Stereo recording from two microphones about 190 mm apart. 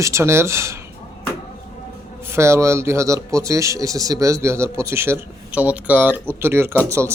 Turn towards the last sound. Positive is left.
turn(degrees=-15)  # may be behind; listen again after turning